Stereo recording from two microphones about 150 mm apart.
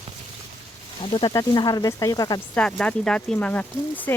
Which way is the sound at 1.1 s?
25° left (ahead or behind).